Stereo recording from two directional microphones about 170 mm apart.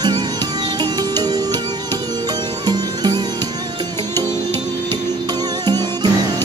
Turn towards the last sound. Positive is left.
turn(degrees=-25)  # may be behind; listen again after turning